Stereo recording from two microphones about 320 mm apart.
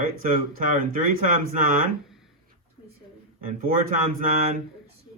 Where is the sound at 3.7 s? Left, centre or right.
Right.